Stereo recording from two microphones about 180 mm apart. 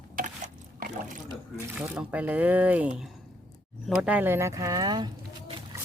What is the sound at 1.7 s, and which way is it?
Speech, 10° right (ahead or behind).